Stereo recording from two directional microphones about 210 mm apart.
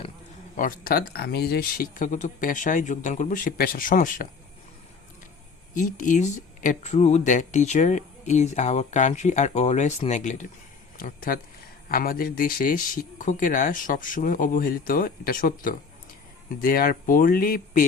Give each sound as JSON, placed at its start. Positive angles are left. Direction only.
{"t": 0.5, "sound": "speech", "side_deg": 40}
{"t": 5.7, "sound": "speech", "side_deg": 40}